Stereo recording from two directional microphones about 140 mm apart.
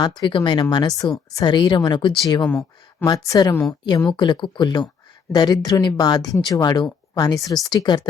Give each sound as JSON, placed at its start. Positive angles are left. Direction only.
{"t": 0.0, "sound": "speech", "side_deg": 30}
{"t": 2.4, "sound": "speech", "side_deg": 15}
{"t": 3.1, "sound": "speech", "side_deg": 30}